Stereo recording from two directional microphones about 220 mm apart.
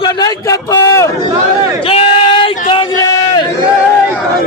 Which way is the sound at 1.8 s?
25° left (ahead or behind).